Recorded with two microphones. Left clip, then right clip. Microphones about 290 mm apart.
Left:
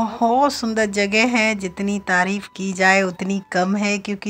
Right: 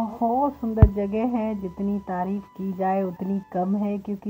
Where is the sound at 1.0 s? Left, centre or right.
Left.